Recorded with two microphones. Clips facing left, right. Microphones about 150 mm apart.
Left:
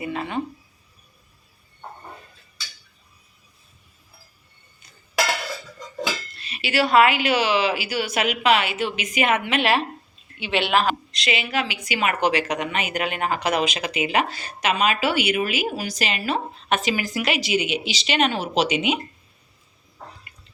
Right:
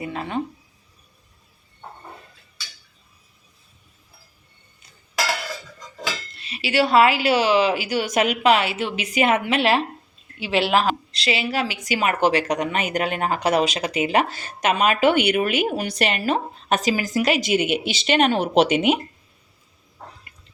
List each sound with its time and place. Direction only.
0.0 s speech: centre (ahead or behind)
6.3 s a woman's voice: 25° right (ahead or behind); by 8.7 s 40° right (ahead or behind)
8.7 s a woman's voice: 30° right (ahead or behind); by 18.9 s 55° right (ahead or behind)